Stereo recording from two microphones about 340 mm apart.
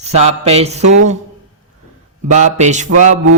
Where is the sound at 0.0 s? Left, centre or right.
Centre.